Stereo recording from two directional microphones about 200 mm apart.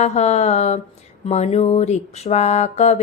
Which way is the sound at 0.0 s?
35° left (ahead or behind).